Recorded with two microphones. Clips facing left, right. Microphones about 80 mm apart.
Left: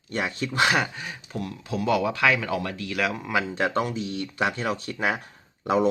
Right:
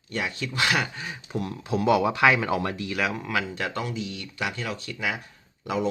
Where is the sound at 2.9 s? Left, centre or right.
Centre.